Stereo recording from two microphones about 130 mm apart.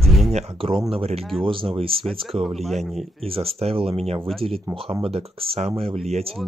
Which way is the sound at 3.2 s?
50° right (ahead or behind).